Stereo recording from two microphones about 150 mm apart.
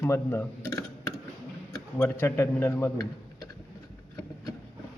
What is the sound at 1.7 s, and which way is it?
Speech, 15° left (ahead or behind).